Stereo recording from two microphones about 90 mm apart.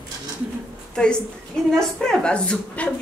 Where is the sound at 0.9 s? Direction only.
10° left (ahead or behind).